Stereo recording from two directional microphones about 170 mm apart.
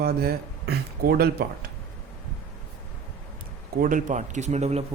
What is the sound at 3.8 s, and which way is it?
Speech, 50° right (ahead or behind).